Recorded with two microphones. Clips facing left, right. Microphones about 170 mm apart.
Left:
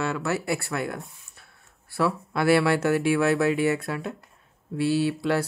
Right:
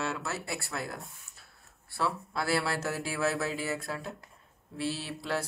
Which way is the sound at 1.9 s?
70° left (ahead or behind).